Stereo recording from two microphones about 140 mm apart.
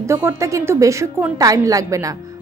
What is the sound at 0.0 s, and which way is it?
A woman's voice, 20° right (ahead or behind).